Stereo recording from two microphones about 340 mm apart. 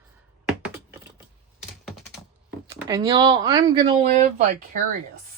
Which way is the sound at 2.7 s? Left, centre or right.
Centre.